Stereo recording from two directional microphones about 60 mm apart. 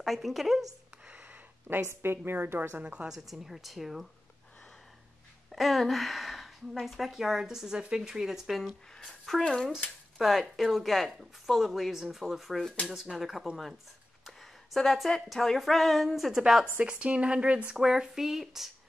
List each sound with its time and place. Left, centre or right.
0.0 s speech: centre
1.2 s a sound: right
1.8 s a woman's voice: right
2.8 s speech: centre
3.1 s speech: centre
5.5 s speech: centre
8.9 s speech: centre
16.8 s speech: centre